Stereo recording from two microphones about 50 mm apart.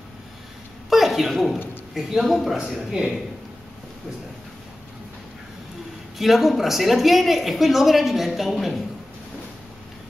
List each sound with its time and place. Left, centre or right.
0.8 s a sound: centre
2.0 s a man's voice: centre
2.9 s a man's voice: centre
6.1 s a woman's voice: centre